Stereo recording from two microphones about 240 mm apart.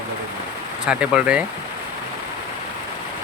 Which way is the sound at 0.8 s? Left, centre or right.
Centre.